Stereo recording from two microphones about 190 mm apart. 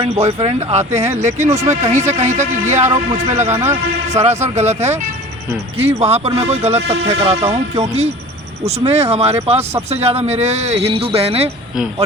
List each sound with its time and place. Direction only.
0.0 s speech: 35° right (ahead or behind)
0.9 s speech: 15° right (ahead or behind)
1.6 s speech: 35° right (ahead or behind)
3.3 s speech: 10° right (ahead or behind)
4.1 s speech: 35° right (ahead or behind)
6.0 s speech: 35° right (ahead or behind)